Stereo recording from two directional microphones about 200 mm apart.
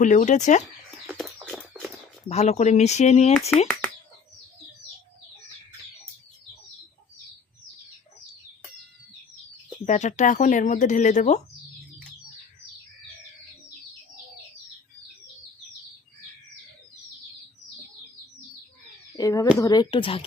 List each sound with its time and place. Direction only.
0.0 s speech: 40° left (ahead or behind)
1.0 s bird: 5° left (ahead or behind)
1.5 s a sound: 5° right (ahead or behind)
2.3 s speech: 30° left (ahead or behind)
9.8 s speech: 35° left (ahead or behind)
19.1 s a sound: 15° left (ahead or behind)
19.5 s speech: 20° left (ahead or behind)